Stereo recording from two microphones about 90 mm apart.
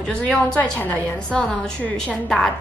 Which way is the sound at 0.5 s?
25° left (ahead or behind).